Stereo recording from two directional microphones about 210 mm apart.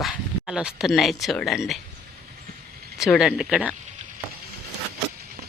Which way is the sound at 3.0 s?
Centre (ahead or behind).